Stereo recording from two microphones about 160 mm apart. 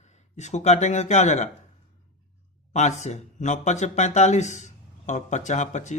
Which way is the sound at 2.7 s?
45° left (ahead or behind).